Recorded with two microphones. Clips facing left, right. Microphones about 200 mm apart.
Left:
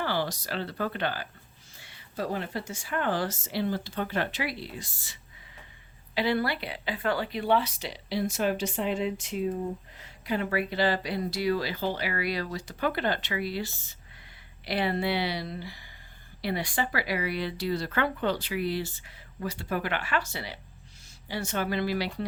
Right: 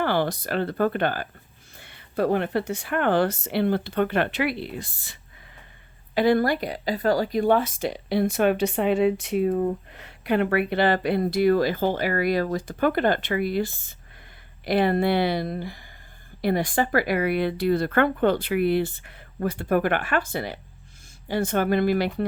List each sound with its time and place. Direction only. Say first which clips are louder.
0.0 s speech: right 6 dB; 55° right (ahead or behind)
6.1 s speech: right 7 dB; 45° right (ahead or behind)